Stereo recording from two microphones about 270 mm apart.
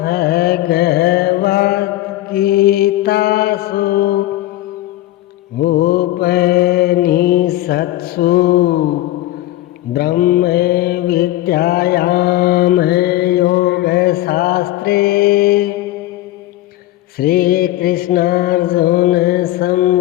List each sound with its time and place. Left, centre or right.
0.0 s mantra: left
5.5 s mantra: left
9.9 s mantra: left
17.2 s mantra: left